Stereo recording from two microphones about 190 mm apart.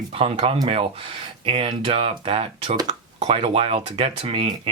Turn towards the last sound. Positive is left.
turn(degrees=-30)  # may be behind; listen again after turning